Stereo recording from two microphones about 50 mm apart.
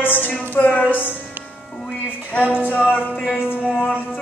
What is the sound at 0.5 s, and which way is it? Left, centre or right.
Music, left.